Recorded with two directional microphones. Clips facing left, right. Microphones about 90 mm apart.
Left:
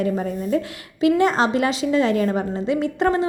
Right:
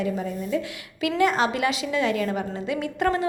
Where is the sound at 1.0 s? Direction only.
30° left (ahead or behind).